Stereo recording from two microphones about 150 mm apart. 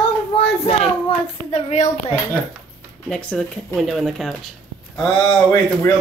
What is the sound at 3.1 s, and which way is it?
A woman's voice, 5° left (ahead or behind).